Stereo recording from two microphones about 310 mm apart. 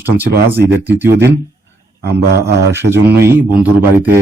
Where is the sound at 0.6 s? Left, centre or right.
Centre.